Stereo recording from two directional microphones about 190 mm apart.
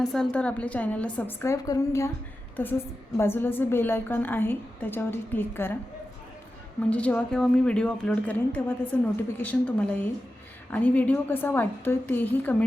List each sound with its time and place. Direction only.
0.0 s a woman's voice: 5° left (ahead or behind)
6.9 s a woman's voice: 5° left (ahead or behind)